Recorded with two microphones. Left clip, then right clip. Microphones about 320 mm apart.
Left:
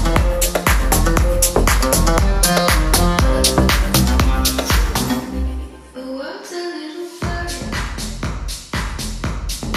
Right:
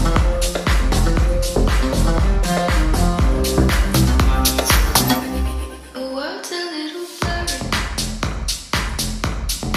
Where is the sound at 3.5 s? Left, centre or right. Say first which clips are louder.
Left 2 dB; centre.